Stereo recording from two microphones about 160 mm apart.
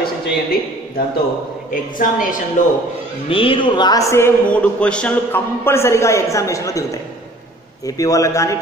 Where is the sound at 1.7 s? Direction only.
55° left (ahead or behind).